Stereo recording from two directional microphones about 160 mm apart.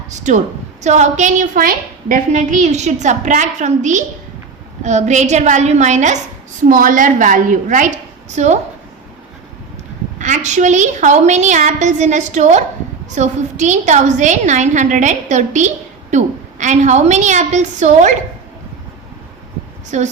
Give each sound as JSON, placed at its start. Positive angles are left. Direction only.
{"t": 0.1, "sound": "a woman's voice", "side_deg": -50}
{"t": 10.2, "sound": "a woman's voice", "side_deg": -50}
{"t": 19.9, "sound": "a woman's voice", "side_deg": -50}